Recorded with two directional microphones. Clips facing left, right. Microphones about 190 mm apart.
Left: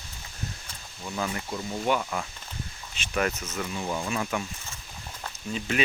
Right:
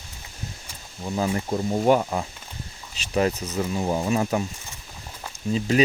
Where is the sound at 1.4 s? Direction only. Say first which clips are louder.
Right 9 dB; 40° right (ahead or behind).